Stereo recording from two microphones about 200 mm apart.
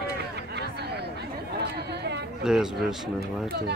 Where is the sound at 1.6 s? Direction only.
60° right (ahead or behind).